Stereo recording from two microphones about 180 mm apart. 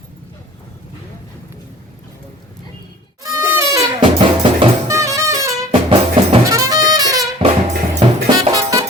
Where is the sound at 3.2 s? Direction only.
15° right (ahead or behind).